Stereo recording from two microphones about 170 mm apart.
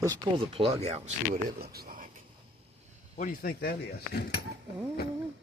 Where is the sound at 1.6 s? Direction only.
65° right (ahead or behind).